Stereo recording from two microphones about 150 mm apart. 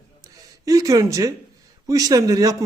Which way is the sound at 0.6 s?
25° right (ahead or behind).